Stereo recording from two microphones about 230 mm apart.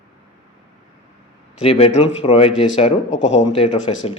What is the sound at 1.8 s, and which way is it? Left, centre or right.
Speech, left.